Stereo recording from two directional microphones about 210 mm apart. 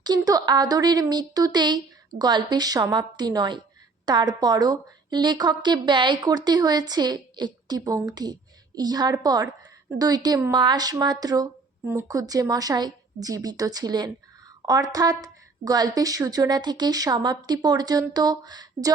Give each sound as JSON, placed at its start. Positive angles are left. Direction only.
{"t": 0.0, "sound": "a woman's voice", "side_deg": -20}